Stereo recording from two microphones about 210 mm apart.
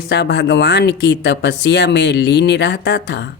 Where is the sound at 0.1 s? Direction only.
55° left (ahead or behind).